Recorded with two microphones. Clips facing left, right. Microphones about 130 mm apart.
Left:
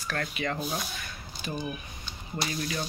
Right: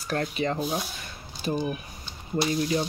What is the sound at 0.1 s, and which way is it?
Speech, 25° right (ahead or behind).